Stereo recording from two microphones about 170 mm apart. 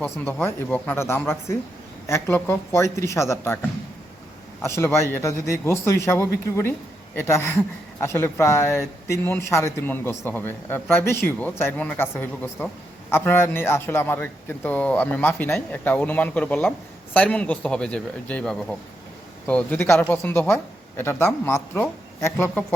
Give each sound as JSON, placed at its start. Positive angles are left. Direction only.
{"t": 0.0, "sound": "speech", "side_deg": 10}
{"t": 4.6, "sound": "speech", "side_deg": 15}